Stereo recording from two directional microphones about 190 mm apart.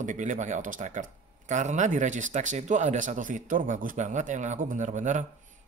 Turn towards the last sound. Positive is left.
turn(degrees=-40)  # may be behind; listen again after turning